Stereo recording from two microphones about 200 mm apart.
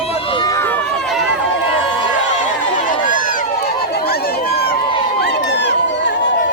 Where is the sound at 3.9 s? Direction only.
50° left (ahead or behind).